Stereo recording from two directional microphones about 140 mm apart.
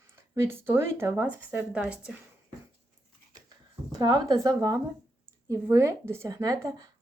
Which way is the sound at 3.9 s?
30° right (ahead or behind).